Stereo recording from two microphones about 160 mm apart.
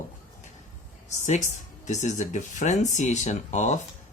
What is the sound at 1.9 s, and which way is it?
Speech, 45° left (ahead or behind).